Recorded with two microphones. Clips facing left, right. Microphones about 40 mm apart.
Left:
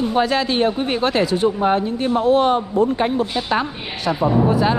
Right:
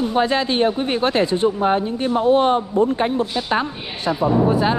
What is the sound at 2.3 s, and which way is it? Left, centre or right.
Speech, left.